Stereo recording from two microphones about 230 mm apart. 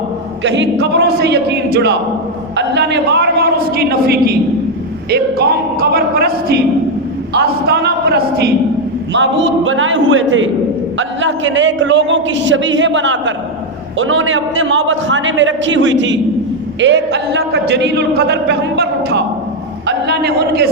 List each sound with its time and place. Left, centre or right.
0.4 s a man's voice: right
5.8 s a man's voice: right